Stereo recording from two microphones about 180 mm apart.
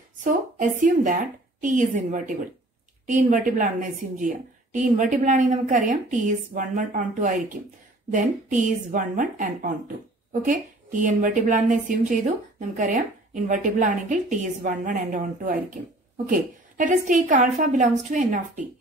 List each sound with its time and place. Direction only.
0.2 s a woman's voice: 45° right (ahead or behind)